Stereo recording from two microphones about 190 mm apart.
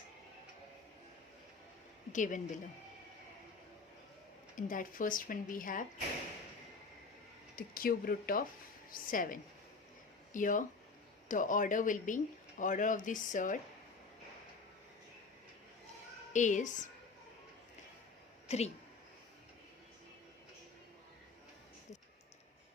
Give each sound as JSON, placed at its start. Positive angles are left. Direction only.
{"t": 2.1, "sound": "speech", "side_deg": 40}
{"t": 4.5, "sound": "speech", "side_deg": 45}
{"t": 7.5, "sound": "speech", "side_deg": 50}
{"t": 16.3, "sound": "speech", "side_deg": 40}
{"t": 18.4, "sound": "a woman's voice", "side_deg": 35}